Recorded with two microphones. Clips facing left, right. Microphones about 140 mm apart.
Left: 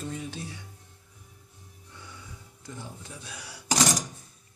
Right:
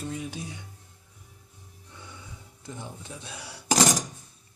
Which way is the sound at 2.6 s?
20° right (ahead or behind).